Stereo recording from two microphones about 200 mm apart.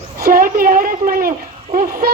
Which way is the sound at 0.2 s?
45° right (ahead or behind).